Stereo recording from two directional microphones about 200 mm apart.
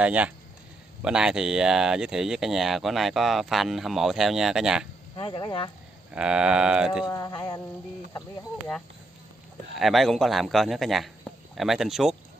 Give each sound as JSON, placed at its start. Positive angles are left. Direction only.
{"t": 0.0, "sound": "speech", "side_deg": -5}
{"t": 5.1, "sound": "speech", "side_deg": 25}
{"t": 6.1, "sound": "speech", "side_deg": -5}
{"t": 7.1, "sound": "speech", "side_deg": 15}
{"t": 9.8, "sound": "speech", "side_deg": 0}